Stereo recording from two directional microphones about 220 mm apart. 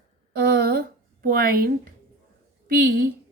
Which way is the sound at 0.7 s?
45° right (ahead or behind).